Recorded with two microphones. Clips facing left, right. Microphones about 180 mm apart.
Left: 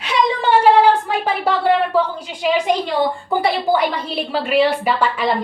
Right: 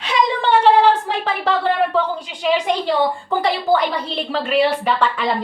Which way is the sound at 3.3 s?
10° left (ahead or behind).